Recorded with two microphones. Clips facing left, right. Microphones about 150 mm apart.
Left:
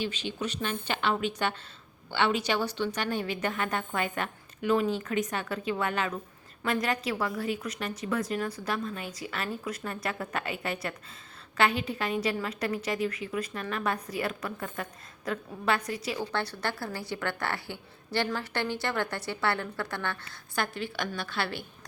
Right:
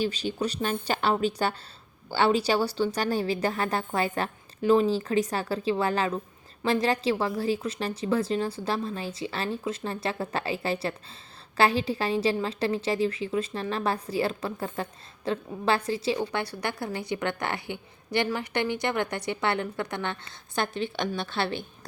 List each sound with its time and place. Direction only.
0.0 s a woman's voice: 40° right (ahead or behind)
16.3 s a woman's voice: 10° right (ahead or behind)